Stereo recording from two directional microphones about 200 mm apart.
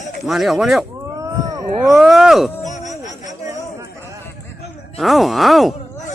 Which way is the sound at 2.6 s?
35° left (ahead or behind).